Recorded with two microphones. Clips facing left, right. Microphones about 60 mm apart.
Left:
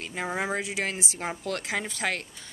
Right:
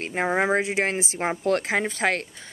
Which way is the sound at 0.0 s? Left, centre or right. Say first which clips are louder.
Right 7 dB; right.